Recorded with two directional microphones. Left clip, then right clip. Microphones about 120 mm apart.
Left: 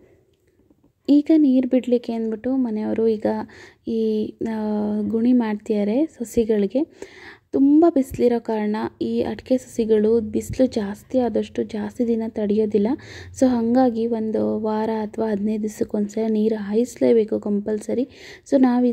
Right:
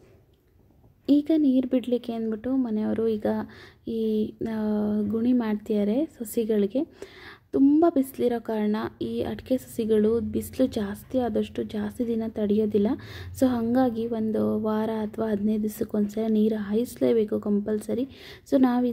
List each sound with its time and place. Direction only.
1.0 s a woman's voice: 35° left (ahead or behind)